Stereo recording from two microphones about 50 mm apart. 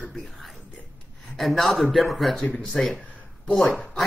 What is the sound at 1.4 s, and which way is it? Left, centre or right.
Speech, centre.